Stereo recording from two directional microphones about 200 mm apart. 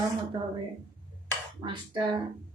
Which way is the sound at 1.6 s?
25° right (ahead or behind).